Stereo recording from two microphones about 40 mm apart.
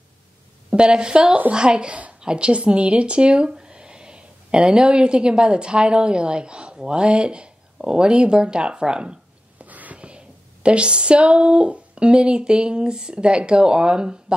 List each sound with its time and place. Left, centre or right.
0.7 s a woman's voice: right
9.6 s a sound: right
9.9 s speech: right